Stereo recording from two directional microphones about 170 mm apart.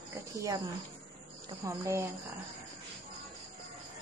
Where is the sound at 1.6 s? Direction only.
20° right (ahead or behind).